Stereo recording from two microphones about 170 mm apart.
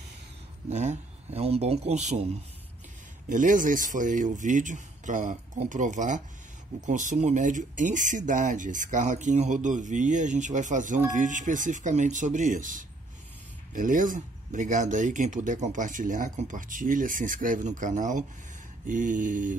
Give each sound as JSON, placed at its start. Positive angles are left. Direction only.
{"t": 0.7, "sound": "speech", "side_deg": -40}